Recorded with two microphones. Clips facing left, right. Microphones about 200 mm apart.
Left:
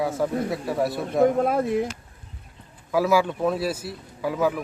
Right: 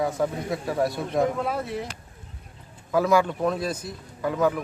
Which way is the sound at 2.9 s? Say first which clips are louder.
Even; 5° left (ahead or behind).